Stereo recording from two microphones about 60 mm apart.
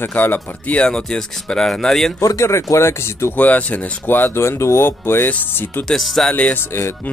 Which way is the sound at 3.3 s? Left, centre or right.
Left.